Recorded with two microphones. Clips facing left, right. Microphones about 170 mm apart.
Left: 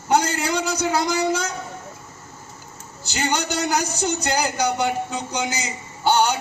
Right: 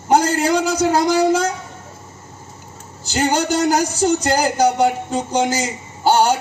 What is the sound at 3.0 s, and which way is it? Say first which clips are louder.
A man's voice: right 6 dB; 45° right (ahead or behind).